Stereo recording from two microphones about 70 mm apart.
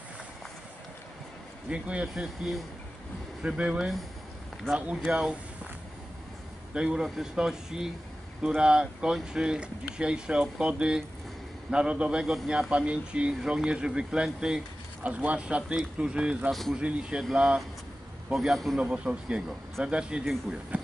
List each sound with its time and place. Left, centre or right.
1.7 s speech: centre
2.1 s speech: centre
6.7 s speech: centre
20.7 s a sound: centre